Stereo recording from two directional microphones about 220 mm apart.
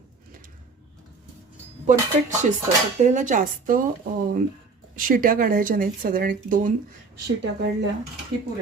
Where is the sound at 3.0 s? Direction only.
35° right (ahead or behind).